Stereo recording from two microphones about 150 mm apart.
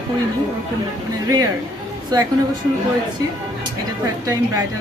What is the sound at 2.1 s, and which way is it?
Speech, 25° right (ahead or behind).